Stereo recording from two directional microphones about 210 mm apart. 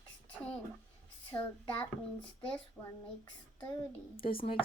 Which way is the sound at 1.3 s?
10° left (ahead or behind).